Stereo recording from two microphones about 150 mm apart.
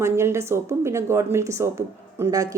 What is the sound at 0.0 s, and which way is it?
A woman's voice, 20° right (ahead or behind).